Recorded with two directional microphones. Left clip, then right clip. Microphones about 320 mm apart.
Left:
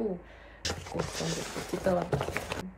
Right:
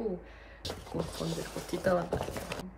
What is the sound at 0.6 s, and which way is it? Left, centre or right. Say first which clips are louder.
Speech: left 3 dB; left.